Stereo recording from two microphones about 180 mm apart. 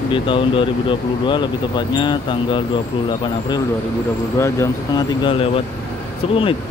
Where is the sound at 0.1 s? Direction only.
30° left (ahead or behind).